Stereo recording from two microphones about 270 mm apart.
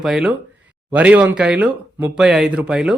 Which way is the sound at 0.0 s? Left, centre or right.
Centre.